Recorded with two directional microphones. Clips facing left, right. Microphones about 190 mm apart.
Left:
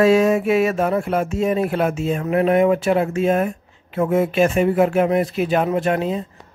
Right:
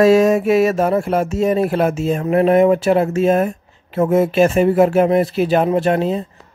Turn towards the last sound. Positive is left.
turn(degrees=-30)  # may be behind; listen again after turning